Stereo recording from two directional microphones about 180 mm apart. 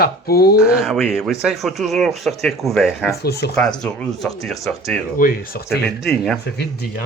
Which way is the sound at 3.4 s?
75° left (ahead or behind).